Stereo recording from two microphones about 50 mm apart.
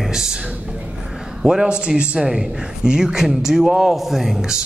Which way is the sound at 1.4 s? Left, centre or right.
Centre.